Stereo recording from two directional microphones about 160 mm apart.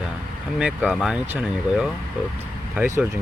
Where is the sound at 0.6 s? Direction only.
5° right (ahead or behind).